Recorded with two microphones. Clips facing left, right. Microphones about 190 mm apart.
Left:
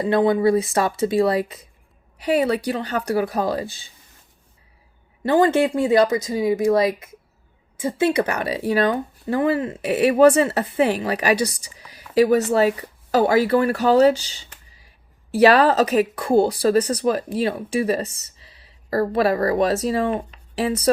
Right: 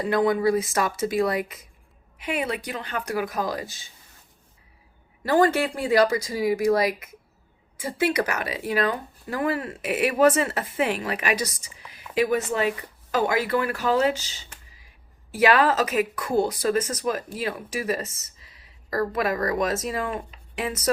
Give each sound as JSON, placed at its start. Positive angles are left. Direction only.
{"t": 0.0, "sound": "a woman's voice", "side_deg": 25}
{"t": 5.2, "sound": "speech", "side_deg": 20}